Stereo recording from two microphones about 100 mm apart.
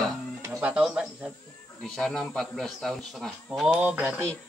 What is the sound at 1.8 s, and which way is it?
Speech, 5° left (ahead or behind).